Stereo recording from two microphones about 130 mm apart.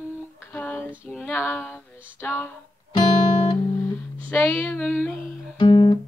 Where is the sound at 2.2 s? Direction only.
15° left (ahead or behind).